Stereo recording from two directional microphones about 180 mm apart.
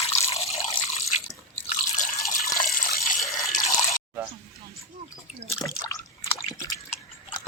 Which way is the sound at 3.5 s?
40° left (ahead or behind).